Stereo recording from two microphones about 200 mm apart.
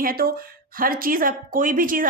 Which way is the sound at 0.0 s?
45° right (ahead or behind).